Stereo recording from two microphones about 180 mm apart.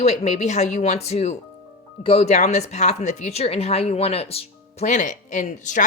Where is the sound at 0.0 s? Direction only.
35° left (ahead or behind).